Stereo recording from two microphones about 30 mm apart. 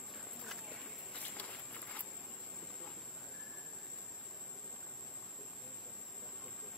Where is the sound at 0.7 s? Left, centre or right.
Left.